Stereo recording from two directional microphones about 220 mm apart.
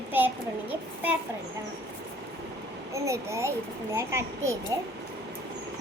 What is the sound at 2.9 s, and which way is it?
A child's voice, 15° right (ahead or behind).